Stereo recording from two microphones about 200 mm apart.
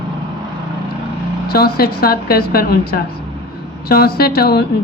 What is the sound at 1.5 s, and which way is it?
Speech, 50° left (ahead or behind).